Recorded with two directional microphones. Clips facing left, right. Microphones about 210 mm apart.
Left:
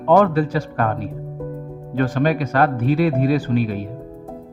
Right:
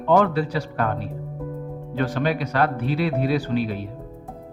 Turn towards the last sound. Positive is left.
turn(degrees=45)  # may be behind; listen again after turning